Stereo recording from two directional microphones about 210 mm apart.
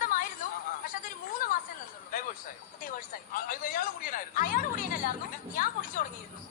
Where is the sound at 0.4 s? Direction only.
40° left (ahead or behind).